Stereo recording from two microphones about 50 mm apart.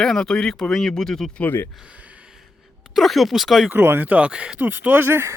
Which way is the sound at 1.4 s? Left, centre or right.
Left.